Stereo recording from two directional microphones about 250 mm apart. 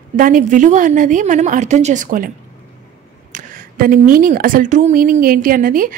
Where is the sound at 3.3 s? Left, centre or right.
Right.